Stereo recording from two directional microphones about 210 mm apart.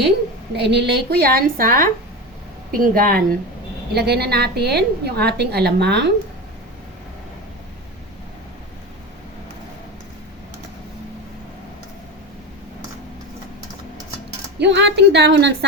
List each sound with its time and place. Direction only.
0.5 s a woman's voice: 50° right (ahead or behind)
14.6 s a woman's voice: 55° right (ahead or behind)